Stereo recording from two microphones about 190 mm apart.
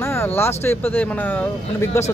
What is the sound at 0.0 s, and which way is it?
Speech, 10° left (ahead or behind).